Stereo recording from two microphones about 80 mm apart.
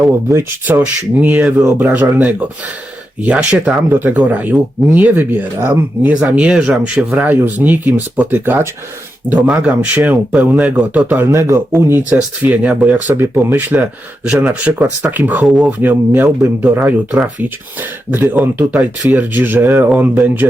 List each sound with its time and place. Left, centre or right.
0.8 s speech: centre
3.8 s speech: right
6.2 s speech: centre
9.5 s speech: centre
11.3 s speech: right; by 13.1 s centre
13.1 s speech: right
18.1 s speech: right